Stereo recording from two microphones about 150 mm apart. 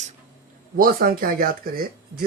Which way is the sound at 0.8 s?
70° right (ahead or behind).